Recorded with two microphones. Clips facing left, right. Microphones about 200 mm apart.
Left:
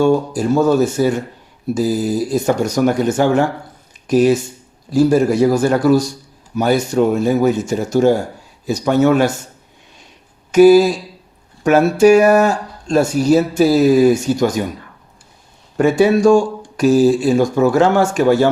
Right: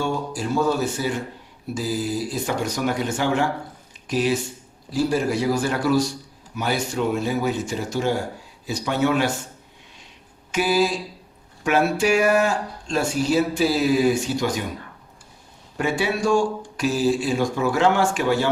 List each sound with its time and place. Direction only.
0.0 s speech: 45° left (ahead or behind)
10.5 s speech: 45° left (ahead or behind)
15.8 s speech: 45° left (ahead or behind)